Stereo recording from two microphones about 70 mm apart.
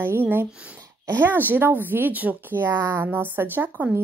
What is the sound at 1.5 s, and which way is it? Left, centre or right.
A woman's voice, right.